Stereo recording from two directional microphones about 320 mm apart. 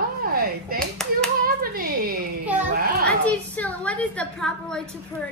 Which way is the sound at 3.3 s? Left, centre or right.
Centre.